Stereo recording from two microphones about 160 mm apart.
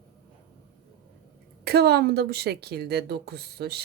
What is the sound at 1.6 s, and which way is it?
Speech, 85° right.